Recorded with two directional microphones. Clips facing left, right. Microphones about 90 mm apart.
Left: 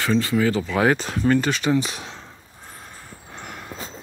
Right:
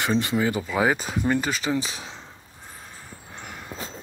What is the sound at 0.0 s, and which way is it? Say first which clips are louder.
Speech: left 3 dB; 20° right (ahead or behind).